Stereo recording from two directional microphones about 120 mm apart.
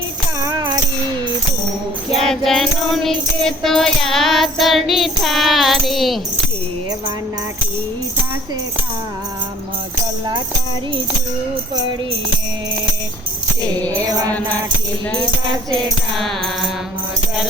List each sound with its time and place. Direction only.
0.4 s tambourine: 30° right (ahead or behind)
2.0 s music: 5° left (ahead or behind)
14.0 s mantra: 30° right (ahead or behind)
15.7 s music: centre (ahead or behind)